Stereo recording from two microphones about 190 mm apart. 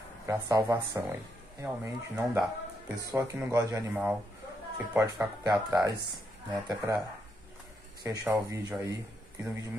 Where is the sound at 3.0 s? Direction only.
15° right (ahead or behind).